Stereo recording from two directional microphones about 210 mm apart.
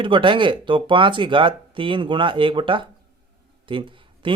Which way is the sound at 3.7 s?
25° right (ahead or behind).